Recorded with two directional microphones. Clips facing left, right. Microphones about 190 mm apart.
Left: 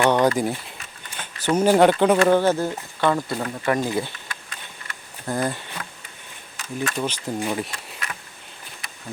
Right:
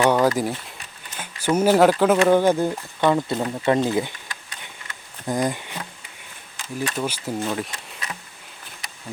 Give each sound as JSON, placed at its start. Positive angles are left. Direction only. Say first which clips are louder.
{"t": 0.0, "sound": "a sound", "louder": "even", "side_deg": -5}
{"t": 1.1, "sound": "speech", "louder": "even", "side_deg": -10}
{"t": 2.4, "sound": "speech", "louder": "right 2 dB", "side_deg": -15}
{"t": 5.2, "sound": "speech", "louder": "right 2 dB", "side_deg": -15}
{"t": 7.4, "sound": "speech", "louder": "left 1 dB", "side_deg": 5}